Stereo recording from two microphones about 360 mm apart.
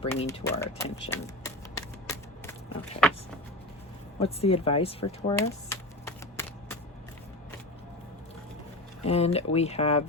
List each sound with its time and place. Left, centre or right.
0.0 s speech: centre
4.2 s speech: centre
5.4 s typewriter: centre
9.0 s speech: centre